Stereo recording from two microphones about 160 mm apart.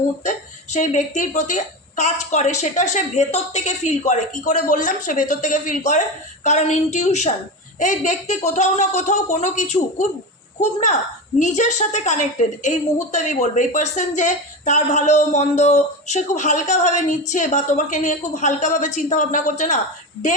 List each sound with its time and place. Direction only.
0.3 s a woman's voice: 50° left (ahead or behind)